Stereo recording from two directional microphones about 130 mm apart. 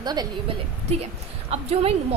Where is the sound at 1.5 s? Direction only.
50° right (ahead or behind).